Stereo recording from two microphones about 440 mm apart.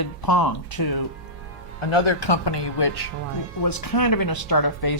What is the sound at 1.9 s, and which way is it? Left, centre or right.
Speech, left.